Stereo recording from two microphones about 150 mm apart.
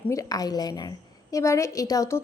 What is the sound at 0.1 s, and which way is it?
A woman's voice, 20° left (ahead or behind).